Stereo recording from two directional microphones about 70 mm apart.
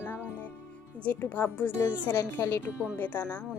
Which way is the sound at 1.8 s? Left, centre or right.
Left.